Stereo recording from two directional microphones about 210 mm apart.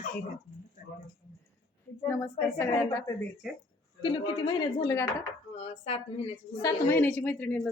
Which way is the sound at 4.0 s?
20° left (ahead or behind).